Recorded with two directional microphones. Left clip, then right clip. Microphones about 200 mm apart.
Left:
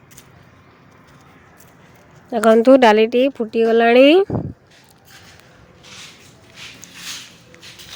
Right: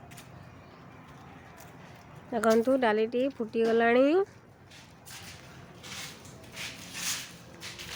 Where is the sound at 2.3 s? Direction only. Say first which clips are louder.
Left 14 dB; 40° left (ahead or behind).